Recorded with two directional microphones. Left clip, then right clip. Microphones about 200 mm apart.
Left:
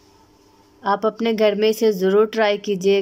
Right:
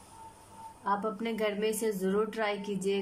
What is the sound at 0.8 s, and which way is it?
Speech, 55° left (ahead or behind).